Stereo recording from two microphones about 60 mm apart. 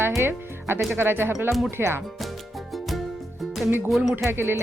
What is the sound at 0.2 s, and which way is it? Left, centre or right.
Music, right.